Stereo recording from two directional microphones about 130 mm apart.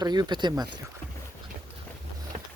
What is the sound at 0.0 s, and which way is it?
Speech, 35° right (ahead or behind).